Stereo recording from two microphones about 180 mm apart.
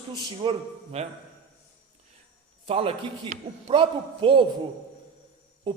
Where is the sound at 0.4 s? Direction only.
25° right (ahead or behind).